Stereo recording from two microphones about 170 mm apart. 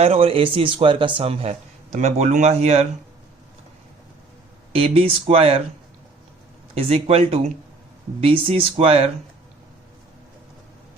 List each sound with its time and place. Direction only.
0.0 s speech: 35° right (ahead or behind)
4.7 s speech: 35° right (ahead or behind)
6.7 s speech: 35° right (ahead or behind)